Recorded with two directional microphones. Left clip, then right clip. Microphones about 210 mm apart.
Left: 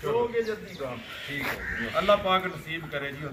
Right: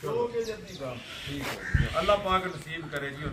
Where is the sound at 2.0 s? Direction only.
10° left (ahead or behind).